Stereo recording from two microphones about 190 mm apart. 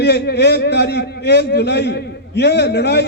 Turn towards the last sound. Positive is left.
turn(degrees=60)  # may be behind; listen again after turning